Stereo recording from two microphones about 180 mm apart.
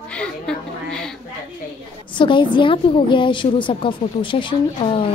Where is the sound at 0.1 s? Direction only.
5° left (ahead or behind).